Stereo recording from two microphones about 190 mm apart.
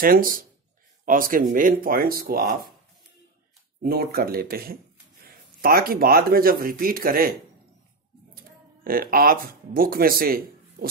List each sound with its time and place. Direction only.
0.0 s speech: 50° right (ahead or behind)
3.8 s speech: 50° right (ahead or behind)
8.8 s speech: 50° right (ahead or behind)